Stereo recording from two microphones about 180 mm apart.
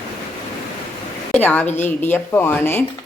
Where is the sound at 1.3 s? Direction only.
10° left (ahead or behind).